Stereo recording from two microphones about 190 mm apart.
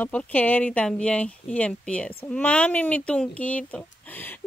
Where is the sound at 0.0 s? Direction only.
10° left (ahead or behind).